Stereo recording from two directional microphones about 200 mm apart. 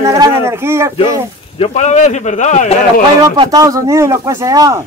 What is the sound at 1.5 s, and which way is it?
A man's voice, 30° left (ahead or behind).